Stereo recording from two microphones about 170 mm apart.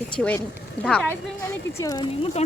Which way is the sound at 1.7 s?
20° left (ahead or behind).